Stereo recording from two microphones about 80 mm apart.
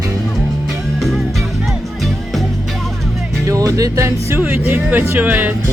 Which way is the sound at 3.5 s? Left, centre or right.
Right.